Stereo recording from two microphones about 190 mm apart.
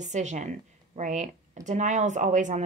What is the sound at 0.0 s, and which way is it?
Speech, 40° right (ahead or behind).